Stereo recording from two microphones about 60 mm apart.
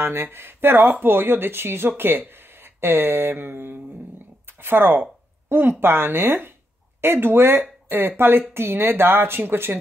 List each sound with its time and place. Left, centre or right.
0.0 s speech: right